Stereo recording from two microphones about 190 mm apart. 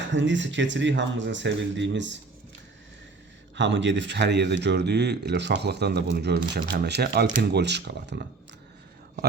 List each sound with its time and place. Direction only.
0.1 s speech: 75° right (ahead or behind)
3.5 s speech: 70° right (ahead or behind)